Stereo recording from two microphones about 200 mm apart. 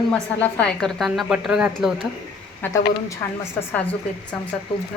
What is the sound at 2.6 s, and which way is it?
A woman's voice, 15° left (ahead or behind).